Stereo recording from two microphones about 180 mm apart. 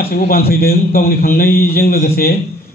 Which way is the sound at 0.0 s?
60° left (ahead or behind).